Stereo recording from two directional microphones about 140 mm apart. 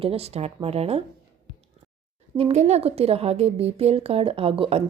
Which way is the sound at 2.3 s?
50° right (ahead or behind).